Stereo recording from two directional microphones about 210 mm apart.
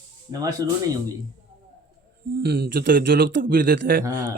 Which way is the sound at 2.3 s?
45° right (ahead or behind).